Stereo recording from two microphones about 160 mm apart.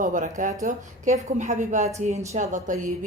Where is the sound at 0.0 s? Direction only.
55° right (ahead or behind).